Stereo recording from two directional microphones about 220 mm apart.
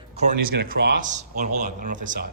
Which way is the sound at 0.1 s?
40° right (ahead or behind).